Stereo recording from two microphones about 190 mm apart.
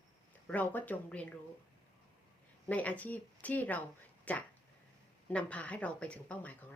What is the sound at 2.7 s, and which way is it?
Speech, 10° left (ahead or behind).